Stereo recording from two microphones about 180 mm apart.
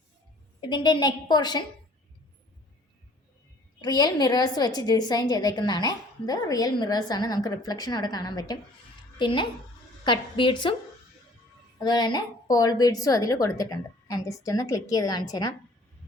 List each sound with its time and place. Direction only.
0.6 s a woman's voice: 25° left (ahead or behind)
3.8 s a woman's voice: 20° left (ahead or behind)
11.8 s a woman's voice: 20° left (ahead or behind)